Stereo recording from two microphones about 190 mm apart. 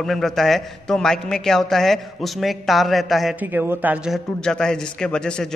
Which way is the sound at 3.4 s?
10° right (ahead or behind).